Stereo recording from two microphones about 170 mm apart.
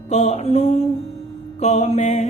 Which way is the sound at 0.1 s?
40° left (ahead or behind).